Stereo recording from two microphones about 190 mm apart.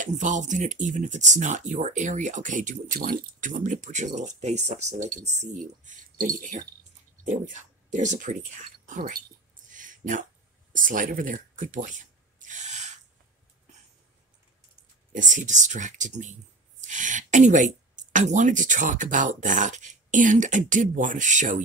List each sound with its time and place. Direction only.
0.0 s speech: 40° right (ahead or behind)
9.7 s a sound: 45° right (ahead or behind)
10.7 s speech: 45° right (ahead or behind)
15.1 s speech: 40° right (ahead or behind)